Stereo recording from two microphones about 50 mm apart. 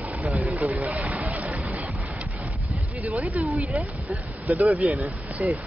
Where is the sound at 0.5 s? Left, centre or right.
Right.